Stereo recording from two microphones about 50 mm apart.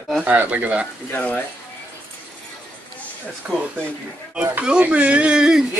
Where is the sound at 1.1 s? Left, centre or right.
Left.